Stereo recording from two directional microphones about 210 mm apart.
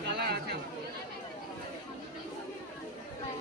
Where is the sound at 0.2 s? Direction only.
50° right (ahead or behind).